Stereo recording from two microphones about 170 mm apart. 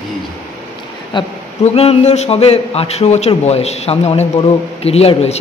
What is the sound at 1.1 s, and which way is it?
A man's voice, 25° left (ahead or behind).